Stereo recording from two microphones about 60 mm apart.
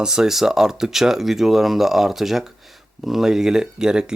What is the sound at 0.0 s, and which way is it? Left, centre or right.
Speech, centre.